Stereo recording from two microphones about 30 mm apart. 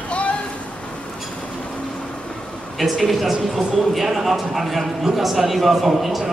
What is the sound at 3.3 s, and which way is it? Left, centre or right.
A man's voice, centre.